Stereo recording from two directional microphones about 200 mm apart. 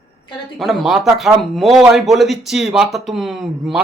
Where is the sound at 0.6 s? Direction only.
Centre (ahead or behind).